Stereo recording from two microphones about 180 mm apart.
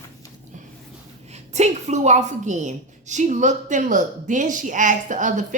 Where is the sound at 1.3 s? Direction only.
40° right (ahead or behind).